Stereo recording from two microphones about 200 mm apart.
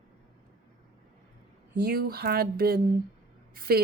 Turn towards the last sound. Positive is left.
turn(degrees=-50)  # may be behind; listen again after turning